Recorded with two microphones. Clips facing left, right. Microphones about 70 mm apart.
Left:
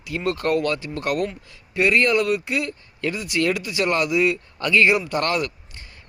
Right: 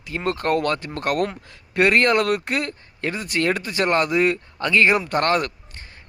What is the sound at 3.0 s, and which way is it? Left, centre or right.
Speech, right.